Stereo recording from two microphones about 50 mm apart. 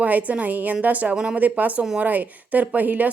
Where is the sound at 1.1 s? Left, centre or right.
Centre.